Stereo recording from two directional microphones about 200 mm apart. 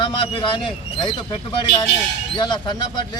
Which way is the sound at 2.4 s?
20° left (ahead or behind).